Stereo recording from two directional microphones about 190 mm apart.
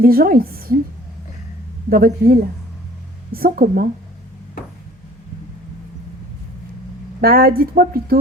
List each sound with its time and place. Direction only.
0.0 s speech: 50° right (ahead or behind)
1.9 s speech: 50° right (ahead or behind)
7.2 s speech: 50° right (ahead or behind)